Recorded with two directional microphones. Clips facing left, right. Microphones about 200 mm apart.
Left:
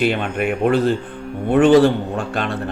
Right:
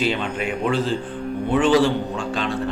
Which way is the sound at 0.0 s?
55° left (ahead or behind).